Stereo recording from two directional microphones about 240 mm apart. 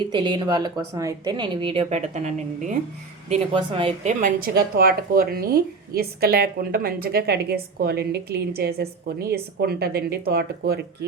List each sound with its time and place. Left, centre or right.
0.1 s speech: centre
4.2 s speech: right